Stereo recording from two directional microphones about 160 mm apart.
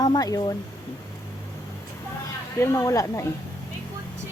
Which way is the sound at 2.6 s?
20° left (ahead or behind).